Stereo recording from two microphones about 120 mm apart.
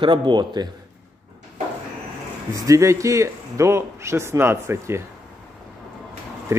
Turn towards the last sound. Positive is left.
turn(degrees=-20)  # may be behind; listen again after turning